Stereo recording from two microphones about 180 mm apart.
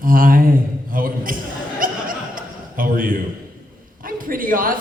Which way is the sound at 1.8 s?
50° right (ahead or behind).